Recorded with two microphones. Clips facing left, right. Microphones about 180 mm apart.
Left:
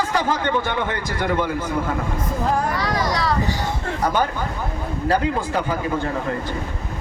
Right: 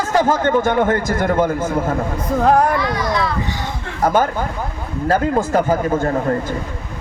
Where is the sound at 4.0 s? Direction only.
45° right (ahead or behind).